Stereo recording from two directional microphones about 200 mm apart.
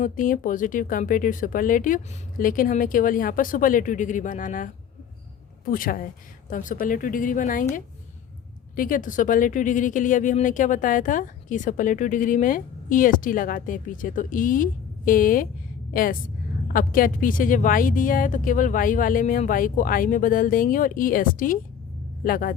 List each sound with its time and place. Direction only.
0.0 s speech: 40° left (ahead or behind)
5.7 s speech: 45° left (ahead or behind)
8.7 s a woman's voice: 45° left (ahead or behind)